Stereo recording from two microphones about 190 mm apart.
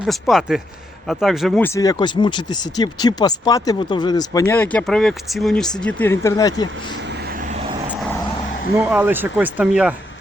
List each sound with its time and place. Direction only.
0.0 s speech: centre (ahead or behind); by 6.7 s 20° left (ahead or behind)
7.1 s vehicle: 50° right (ahead or behind)
8.8 s speech: 10° right (ahead or behind)